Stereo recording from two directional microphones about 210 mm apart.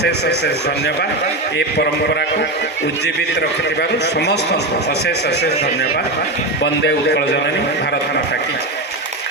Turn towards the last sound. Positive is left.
turn(degrees=55)  # may be behind; listen again after turning